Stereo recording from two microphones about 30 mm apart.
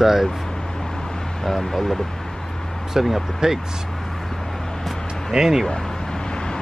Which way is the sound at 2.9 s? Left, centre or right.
Centre.